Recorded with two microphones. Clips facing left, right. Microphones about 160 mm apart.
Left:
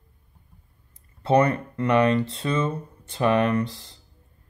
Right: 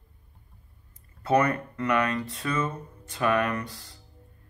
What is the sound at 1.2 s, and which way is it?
Speech, 30° left (ahead or behind).